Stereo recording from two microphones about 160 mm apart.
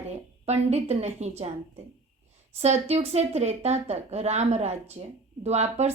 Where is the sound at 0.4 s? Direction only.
40° right (ahead or behind).